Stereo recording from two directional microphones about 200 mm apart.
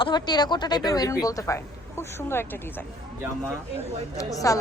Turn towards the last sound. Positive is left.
turn(degrees=15)  # may be behind; listen again after turning